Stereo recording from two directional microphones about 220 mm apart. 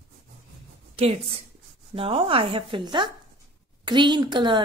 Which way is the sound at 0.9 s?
25° right (ahead or behind).